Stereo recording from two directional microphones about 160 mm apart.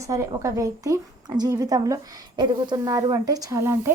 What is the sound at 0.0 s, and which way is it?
A woman's voice, 20° right (ahead or behind).